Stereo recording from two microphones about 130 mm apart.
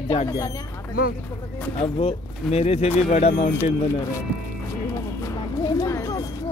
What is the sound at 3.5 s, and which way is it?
Music, 20° left (ahead or behind).